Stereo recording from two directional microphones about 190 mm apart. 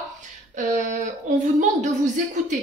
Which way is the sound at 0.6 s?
40° right (ahead or behind).